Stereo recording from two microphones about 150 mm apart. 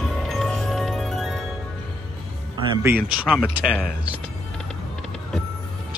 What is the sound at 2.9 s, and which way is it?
Speech, 15° right (ahead or behind).